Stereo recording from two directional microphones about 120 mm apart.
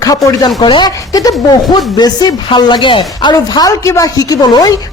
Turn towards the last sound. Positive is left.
turn(degrees=30)  # may be behind; listen again after turning